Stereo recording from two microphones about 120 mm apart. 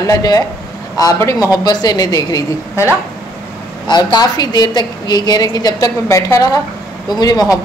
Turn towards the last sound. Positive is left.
turn(degrees=30)  # may be behind; listen again after turning